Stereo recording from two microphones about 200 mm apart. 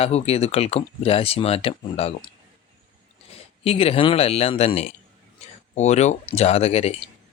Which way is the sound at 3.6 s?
30° left (ahead or behind).